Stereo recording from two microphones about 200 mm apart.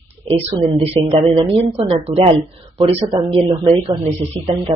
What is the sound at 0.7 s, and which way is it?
Speech, 30° right (ahead or behind).